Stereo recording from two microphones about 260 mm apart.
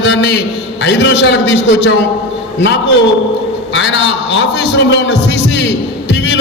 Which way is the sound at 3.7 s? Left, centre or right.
Left.